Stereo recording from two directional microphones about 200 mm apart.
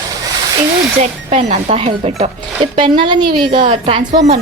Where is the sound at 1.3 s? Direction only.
35° right (ahead or behind).